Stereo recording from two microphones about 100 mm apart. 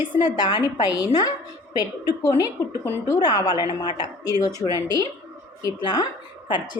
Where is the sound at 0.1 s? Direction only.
45° left (ahead or behind).